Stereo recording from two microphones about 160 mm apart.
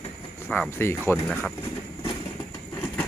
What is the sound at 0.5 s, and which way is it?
Speech, 10° left (ahead or behind).